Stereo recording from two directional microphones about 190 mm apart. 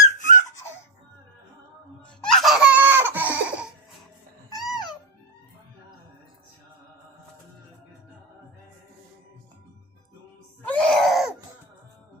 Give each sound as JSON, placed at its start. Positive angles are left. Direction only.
{"t": 0.2, "sound": "squeak", "side_deg": 40}
{"t": 2.2, "sound": "laughter", "side_deg": 0}
{"t": 2.8, "sound": "chicken", "side_deg": -10}
{"t": 4.5, "sound": "music", "side_deg": 0}
{"t": 10.7, "sound": "wheeze", "side_deg": 5}